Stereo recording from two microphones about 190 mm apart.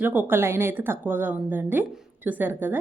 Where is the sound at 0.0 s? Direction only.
10° right (ahead or behind).